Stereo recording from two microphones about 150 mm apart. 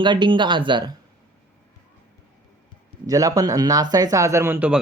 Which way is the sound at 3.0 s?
20° right (ahead or behind).